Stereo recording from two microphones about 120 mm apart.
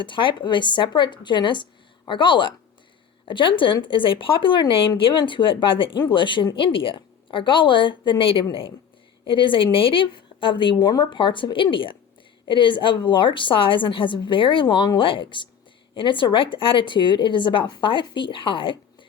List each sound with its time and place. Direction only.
0.0 s speech: 40° left (ahead or behind)